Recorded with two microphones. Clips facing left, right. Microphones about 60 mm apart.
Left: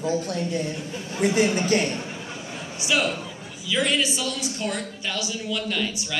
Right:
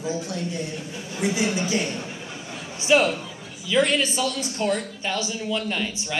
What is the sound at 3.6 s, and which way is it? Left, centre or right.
A man's voice, right.